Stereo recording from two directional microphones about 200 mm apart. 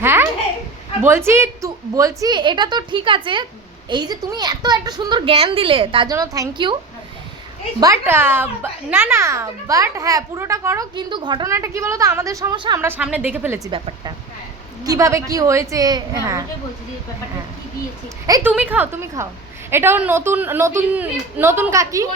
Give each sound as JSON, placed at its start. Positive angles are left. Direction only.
{"t": 0.0, "sound": "a sound", "side_deg": -10}
{"t": 1.0, "sound": "a woman's voice", "side_deg": -10}
{"t": 7.8, "sound": "a child's voice", "side_deg": -15}
{"t": 12.8, "sound": "a child's voice", "side_deg": -10}
{"t": 13.7, "sound": "a woman's voice", "side_deg": -25}
{"t": 18.3, "sound": "a child's voice", "side_deg": -20}